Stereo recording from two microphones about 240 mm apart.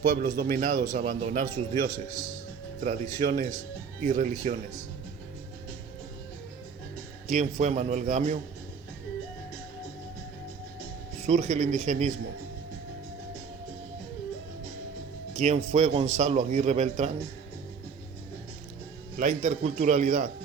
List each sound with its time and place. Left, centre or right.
0.0 s a man's voice: right
7.3 s a man's voice: right
11.2 s a man's voice: right
15.4 s a man's voice: right
19.1 s a man's voice: right